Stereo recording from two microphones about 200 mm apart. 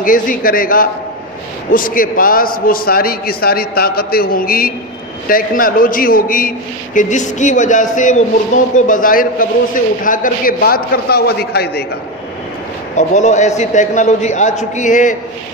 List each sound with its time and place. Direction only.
0.0 s a man's voice: 45° left (ahead or behind)
12.9 s a man's voice: 35° left (ahead or behind)